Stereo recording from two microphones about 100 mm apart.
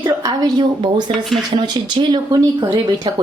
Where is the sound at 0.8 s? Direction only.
50° right (ahead or behind).